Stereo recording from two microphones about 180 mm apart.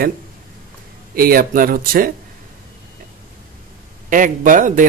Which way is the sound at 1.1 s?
55° right (ahead or behind).